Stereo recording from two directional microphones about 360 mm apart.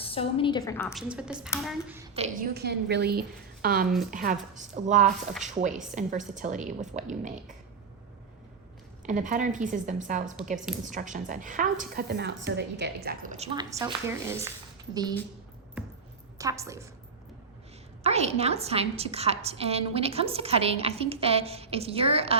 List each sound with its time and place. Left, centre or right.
0.0 s a woman's voice: centre
2.1 s a woman's voice: right
9.0 s a woman's voice: right
15.8 s a sound: centre
16.4 s a woman's voice: centre
18.0 s a woman's voice: centre